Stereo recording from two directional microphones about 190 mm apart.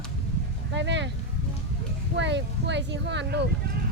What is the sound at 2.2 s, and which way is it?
Speech, 65° right (ahead or behind).